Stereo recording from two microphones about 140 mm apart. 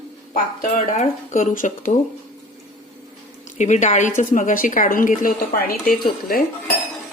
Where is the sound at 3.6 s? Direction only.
60° left (ahead or behind).